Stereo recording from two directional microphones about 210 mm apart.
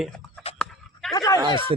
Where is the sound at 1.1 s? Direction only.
15° left (ahead or behind).